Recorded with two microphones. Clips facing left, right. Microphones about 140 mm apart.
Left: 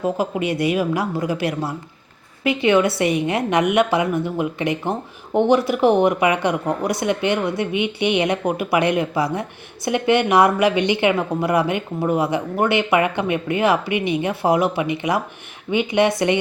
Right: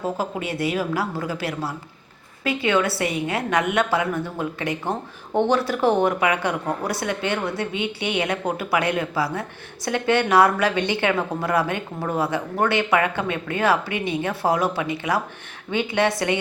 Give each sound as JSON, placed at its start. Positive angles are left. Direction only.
{"t": 0.0, "sound": "a woman's voice", "side_deg": 15}